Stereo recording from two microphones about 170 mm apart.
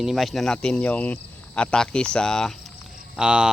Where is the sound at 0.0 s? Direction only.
Centre (ahead or behind).